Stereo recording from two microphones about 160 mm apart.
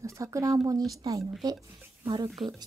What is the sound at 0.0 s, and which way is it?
Speech, 20° right (ahead or behind).